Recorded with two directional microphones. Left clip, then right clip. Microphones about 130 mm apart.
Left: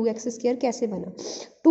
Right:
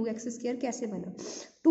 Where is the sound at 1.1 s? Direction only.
20° left (ahead or behind).